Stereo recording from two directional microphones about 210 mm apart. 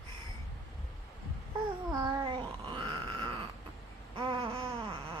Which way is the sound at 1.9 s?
25° right (ahead or behind).